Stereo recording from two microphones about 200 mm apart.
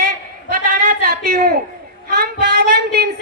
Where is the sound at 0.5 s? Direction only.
50° right (ahead or behind).